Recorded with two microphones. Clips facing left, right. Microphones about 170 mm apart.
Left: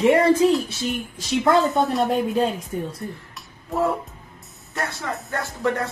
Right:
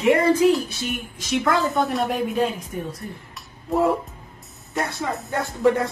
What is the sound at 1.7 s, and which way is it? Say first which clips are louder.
Speech: left 2 dB; centre (ahead or behind).